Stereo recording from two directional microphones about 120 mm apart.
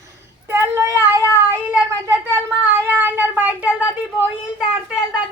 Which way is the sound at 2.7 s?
15° right (ahead or behind).